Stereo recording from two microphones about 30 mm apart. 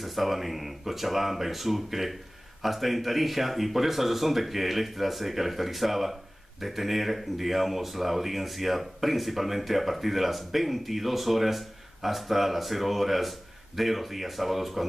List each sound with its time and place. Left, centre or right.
0.0 s speech: centre